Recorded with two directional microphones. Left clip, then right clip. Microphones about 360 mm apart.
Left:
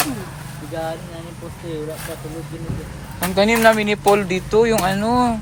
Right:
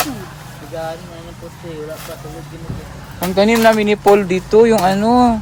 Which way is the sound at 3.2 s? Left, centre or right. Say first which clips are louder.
Right 2 dB; centre.